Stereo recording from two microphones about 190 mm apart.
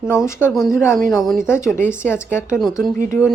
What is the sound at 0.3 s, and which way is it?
Speech, 10° left (ahead or behind).